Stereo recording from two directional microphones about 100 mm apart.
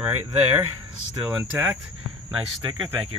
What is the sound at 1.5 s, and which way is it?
Speech, 25° right (ahead or behind).